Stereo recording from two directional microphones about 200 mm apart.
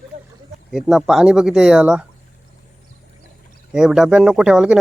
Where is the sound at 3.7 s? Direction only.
5° right (ahead or behind).